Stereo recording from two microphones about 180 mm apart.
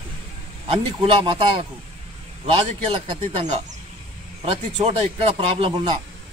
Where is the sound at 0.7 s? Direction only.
30° right (ahead or behind).